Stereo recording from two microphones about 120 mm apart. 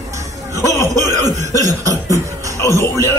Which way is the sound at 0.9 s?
30° right (ahead or behind).